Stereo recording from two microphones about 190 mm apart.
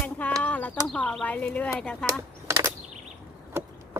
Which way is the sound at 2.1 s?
15° right (ahead or behind).